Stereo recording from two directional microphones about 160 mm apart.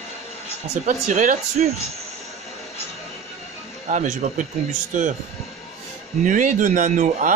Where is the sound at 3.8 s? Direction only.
50° right (ahead or behind).